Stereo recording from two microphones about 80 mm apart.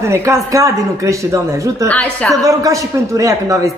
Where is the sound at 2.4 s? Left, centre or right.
Right.